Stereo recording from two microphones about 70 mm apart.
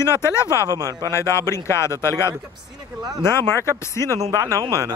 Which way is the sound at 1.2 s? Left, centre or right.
Left.